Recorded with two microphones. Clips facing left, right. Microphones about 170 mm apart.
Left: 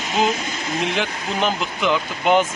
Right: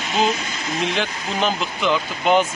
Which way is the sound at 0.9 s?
15° left (ahead or behind).